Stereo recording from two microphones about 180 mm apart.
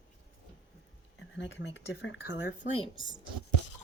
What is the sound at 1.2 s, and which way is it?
Speech, 90° left.